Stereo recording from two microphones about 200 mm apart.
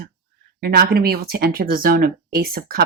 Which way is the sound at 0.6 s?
50° right (ahead or behind).